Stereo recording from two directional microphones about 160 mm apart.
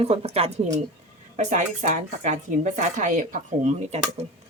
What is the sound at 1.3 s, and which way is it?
Speech, 50° right (ahead or behind).